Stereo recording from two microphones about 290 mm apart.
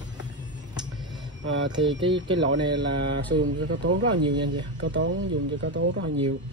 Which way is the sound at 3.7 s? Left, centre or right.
Right.